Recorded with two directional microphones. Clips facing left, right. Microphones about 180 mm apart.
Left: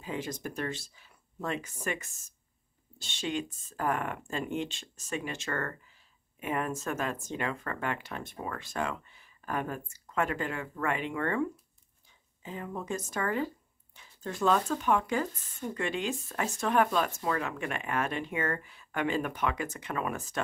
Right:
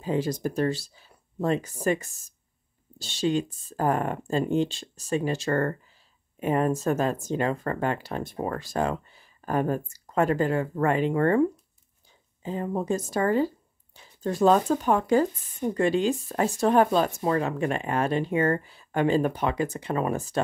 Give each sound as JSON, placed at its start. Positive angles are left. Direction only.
{"t": 0.0, "sound": "speech", "side_deg": -35}
{"t": 12.4, "sound": "speech", "side_deg": -35}